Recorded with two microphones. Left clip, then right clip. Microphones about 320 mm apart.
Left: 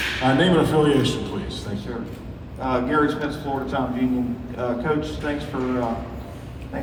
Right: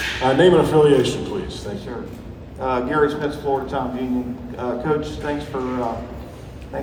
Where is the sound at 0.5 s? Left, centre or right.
Right.